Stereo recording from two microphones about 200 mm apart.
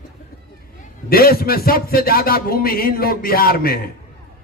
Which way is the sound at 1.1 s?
50° left (ahead or behind).